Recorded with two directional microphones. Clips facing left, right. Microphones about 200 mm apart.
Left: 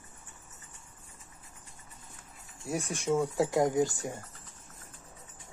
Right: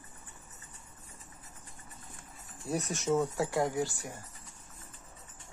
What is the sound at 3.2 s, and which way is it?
Speech, 15° left (ahead or behind).